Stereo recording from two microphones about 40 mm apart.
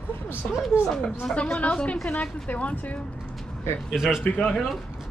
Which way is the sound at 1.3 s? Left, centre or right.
Left.